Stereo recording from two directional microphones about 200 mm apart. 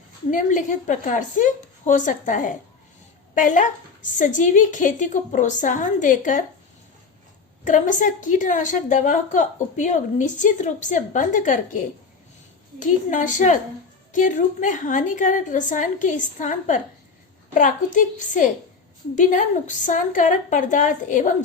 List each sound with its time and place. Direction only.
0.3 s a woman's voice: 40° left (ahead or behind)
7.6 s a woman's voice: 40° left (ahead or behind)
12.8 s a woman's voice: 40° left (ahead or behind)